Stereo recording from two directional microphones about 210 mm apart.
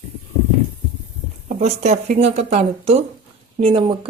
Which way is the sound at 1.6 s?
35° right (ahead or behind).